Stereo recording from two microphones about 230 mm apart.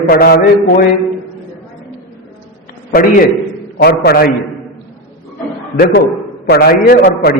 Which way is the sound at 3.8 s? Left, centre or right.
Left.